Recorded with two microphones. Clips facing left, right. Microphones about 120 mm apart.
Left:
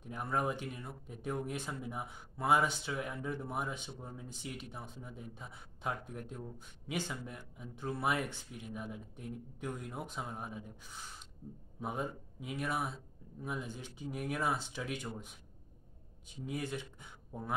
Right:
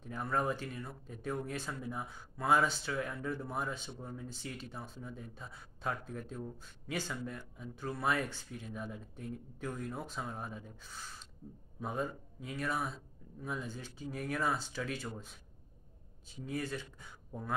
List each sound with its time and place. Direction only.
0.0 s speech: 15° left (ahead or behind)
16.4 s speech: 20° left (ahead or behind)